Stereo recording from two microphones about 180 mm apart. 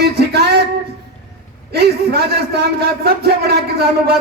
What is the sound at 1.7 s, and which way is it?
A man's voice, 65° right (ahead or behind).